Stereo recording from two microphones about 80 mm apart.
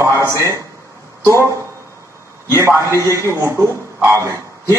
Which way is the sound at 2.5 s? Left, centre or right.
Right.